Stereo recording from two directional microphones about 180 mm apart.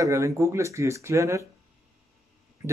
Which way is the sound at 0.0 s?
15° right (ahead or behind).